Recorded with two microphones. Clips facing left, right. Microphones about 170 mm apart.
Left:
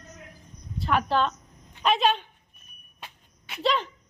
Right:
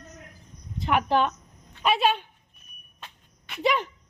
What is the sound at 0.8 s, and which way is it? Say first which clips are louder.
A woman's voice: right 1 dB; 15° right (ahead or behind).